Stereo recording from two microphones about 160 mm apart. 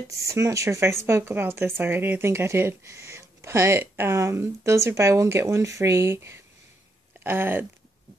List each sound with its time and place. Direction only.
0.1 s a woman's voice: 20° right (ahead or behind)